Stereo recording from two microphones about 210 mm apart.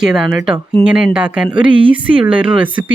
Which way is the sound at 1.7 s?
25° right (ahead or behind).